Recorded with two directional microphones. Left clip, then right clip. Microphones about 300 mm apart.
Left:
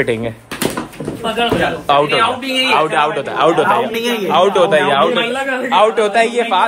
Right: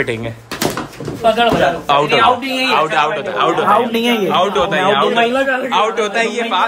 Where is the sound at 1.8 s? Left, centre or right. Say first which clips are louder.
Even; centre.